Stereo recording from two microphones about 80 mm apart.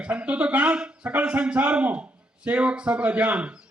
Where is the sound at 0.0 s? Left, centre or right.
Centre.